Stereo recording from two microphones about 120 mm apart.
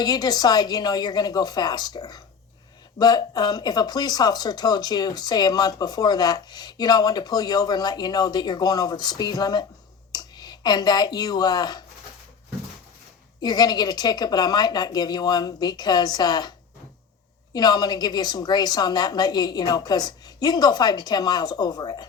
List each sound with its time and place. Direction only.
0.0 s speech: 35° left (ahead or behind)
13.4 s speech: 35° left (ahead or behind)